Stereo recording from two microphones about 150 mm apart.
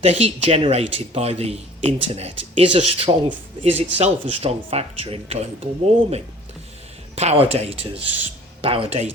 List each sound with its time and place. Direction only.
0.0 s a man's voice: 45° right (ahead or behind)